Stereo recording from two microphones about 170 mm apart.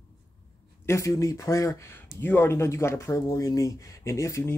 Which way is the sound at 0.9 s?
20° left (ahead or behind).